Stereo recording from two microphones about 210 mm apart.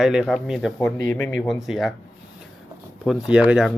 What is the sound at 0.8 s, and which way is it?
Speech, 10° left (ahead or behind).